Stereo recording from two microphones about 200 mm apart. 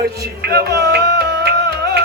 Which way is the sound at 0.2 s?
55° right (ahead or behind).